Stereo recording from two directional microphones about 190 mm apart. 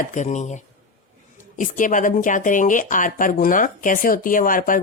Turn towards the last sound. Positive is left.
turn(degrees=45)  # may be behind; listen again after turning